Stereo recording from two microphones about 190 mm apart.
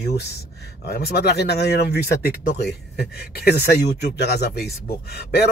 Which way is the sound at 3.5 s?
60° left (ahead or behind).